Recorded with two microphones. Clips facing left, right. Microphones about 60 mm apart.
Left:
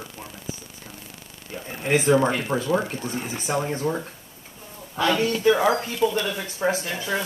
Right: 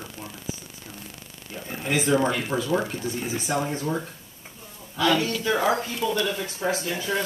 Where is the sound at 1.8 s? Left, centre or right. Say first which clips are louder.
Left 3 dB; left.